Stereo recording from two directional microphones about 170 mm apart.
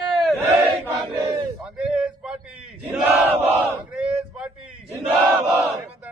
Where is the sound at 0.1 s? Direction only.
Centre (ahead or behind).